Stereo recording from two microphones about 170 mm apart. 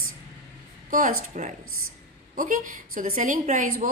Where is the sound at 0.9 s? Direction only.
50° right (ahead or behind).